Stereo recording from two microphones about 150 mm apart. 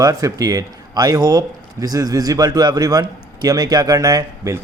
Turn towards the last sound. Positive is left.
turn(degrees=-25)  # may be behind; listen again after turning